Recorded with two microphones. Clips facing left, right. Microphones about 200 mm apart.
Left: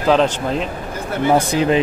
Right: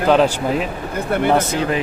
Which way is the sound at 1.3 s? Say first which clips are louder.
Left 3 dB; 15° left (ahead or behind).